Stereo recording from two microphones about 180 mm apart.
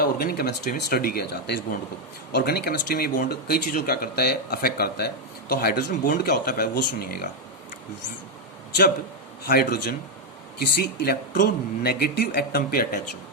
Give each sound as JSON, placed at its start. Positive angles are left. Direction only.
{"t": 0.0, "sound": "speech", "side_deg": 55}
{"t": 9.4, "sound": "speech", "side_deg": 55}